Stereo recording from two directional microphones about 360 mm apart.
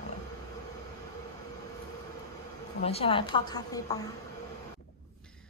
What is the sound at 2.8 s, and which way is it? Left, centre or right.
A woman's voice, centre.